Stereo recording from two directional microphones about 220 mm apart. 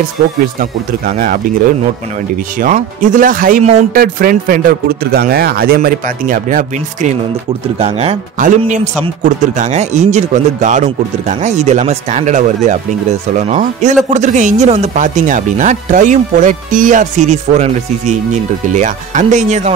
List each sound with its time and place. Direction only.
0.6 s speech: 40° right (ahead or behind)